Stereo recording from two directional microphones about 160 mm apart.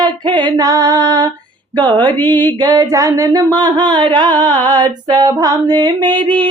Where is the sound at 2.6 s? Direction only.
25° right (ahead or behind).